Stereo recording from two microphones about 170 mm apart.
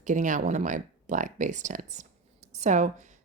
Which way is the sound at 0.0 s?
45° right (ahead or behind).